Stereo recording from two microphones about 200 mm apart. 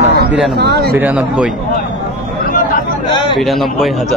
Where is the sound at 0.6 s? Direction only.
55° right (ahead or behind).